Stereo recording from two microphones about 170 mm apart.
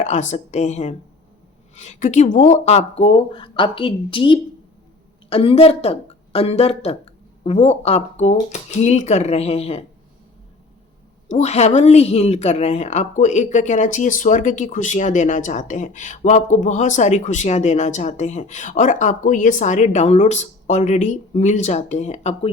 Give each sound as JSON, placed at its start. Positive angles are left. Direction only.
{"t": 0.0, "sound": "a woman's voice", "side_deg": 45}
{"t": 11.3, "sound": "a woman's voice", "side_deg": 40}